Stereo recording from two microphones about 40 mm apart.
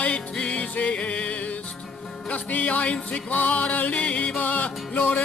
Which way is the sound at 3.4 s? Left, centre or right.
Left.